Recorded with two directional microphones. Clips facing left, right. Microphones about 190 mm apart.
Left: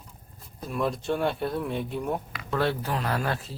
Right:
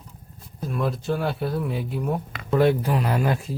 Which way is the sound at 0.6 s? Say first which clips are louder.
Right 2 dB; centre (ahead or behind).